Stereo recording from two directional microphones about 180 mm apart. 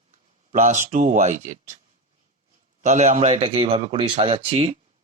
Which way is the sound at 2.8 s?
40° right (ahead or behind).